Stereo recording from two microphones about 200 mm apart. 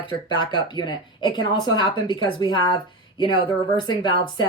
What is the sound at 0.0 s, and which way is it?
Speech, 25° left (ahead or behind).